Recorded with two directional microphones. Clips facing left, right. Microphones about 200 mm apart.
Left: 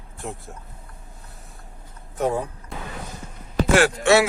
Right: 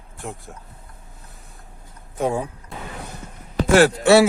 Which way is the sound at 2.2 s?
10° right (ahead or behind).